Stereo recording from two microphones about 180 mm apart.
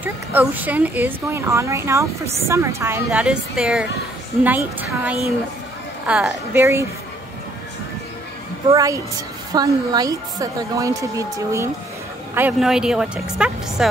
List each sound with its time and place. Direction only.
0.0 s a woman's voice: 10° right (ahead or behind)
8.7 s a woman's voice: 20° right (ahead or behind)
12.4 s a woman's voice: 5° right (ahead or behind)